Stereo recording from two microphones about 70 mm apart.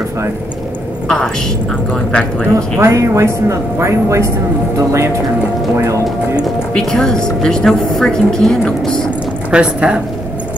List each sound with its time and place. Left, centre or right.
1.0 s a woman's voice: centre
2.5 s speech: right
6.7 s a woman's voice: centre
9.5 s speech: centre